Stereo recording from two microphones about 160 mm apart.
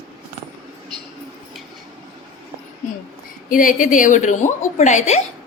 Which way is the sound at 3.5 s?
55° left (ahead or behind).